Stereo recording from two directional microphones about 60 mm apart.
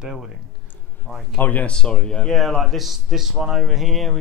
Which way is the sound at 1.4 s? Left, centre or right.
Left.